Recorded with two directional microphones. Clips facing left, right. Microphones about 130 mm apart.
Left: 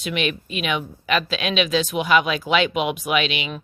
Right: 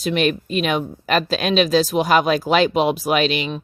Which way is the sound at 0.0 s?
40° right (ahead or behind).